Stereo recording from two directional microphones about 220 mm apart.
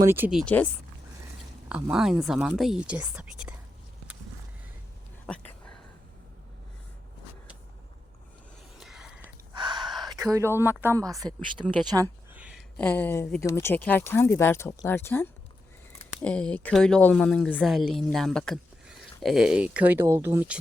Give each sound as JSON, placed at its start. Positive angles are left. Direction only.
{"t": 0.0, "sound": "a woman's voice", "side_deg": -10}
{"t": 1.7, "sound": "a woman's voice", "side_deg": -5}
{"t": 8.8, "sound": "a sound", "side_deg": -5}
{"t": 9.6, "sound": "gasp", "side_deg": -20}
{"t": 10.3, "sound": "a woman's voice", "side_deg": -10}